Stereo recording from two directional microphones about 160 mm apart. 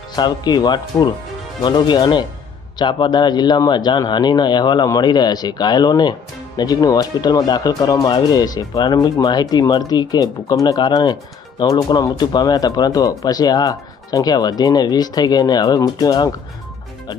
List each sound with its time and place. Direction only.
0.2 s speech: 25° left (ahead or behind)